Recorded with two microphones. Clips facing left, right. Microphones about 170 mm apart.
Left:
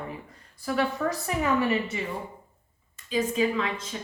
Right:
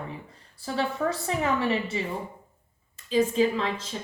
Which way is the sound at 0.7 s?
30° right (ahead or behind).